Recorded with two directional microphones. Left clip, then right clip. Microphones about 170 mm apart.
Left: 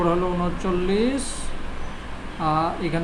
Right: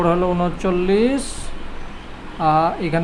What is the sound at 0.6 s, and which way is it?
Speech, 40° right (ahead or behind).